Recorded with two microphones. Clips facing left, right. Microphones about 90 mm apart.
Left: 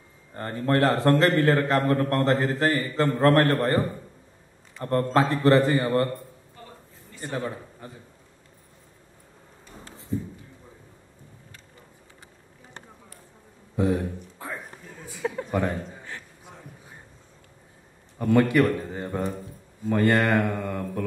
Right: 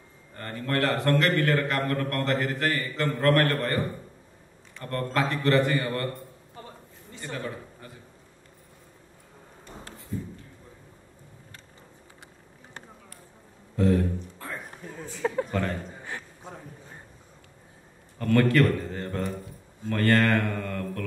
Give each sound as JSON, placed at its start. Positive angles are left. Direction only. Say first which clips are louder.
{"t": 0.4, "sound": "a man's voice", "louder": "left 5 dB", "side_deg": 25}
{"t": 4.8, "sound": "a man's voice", "louder": "left 5 dB", "side_deg": 30}
{"t": 7.2, "sound": "a man's voice", "louder": "left 4 dB", "side_deg": 25}
{"t": 10.1, "sound": "a sound", "louder": "left 5 dB", "side_deg": 20}
{"t": 13.7, "sound": "a sound", "louder": "right 1 dB", "side_deg": 15}
{"t": 15.5, "sound": "speech", "louder": "left 3 dB", "side_deg": 15}
{"t": 18.1, "sound": "speech", "louder": "left 2 dB", "side_deg": 15}